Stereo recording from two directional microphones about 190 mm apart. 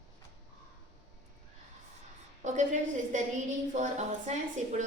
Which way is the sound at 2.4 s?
40° right (ahead or behind).